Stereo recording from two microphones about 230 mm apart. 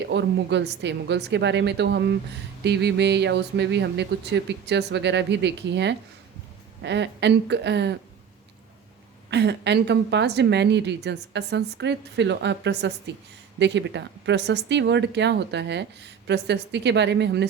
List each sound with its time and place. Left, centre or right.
0.1 s speech: right
9.3 s speech: right